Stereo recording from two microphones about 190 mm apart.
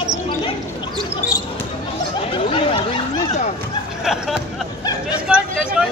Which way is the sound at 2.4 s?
30° left (ahead or behind).